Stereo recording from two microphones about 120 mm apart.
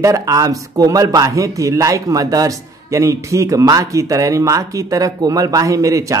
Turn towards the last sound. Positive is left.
turn(degrees=-25)  # may be behind; listen again after turning